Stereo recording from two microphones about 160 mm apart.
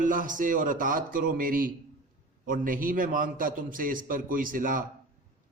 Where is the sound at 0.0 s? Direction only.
55° right (ahead or behind).